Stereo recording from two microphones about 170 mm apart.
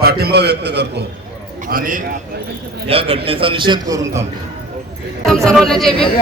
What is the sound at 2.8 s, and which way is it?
A man's voice, 35° right (ahead or behind).